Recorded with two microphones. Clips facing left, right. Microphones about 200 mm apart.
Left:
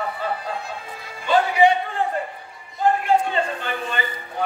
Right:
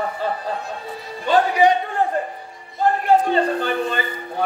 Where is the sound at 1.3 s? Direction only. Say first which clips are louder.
Right 1 dB; 40° right (ahead or behind).